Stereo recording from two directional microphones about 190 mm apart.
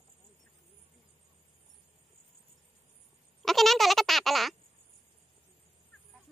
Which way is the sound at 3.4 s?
Centre (ahead or behind).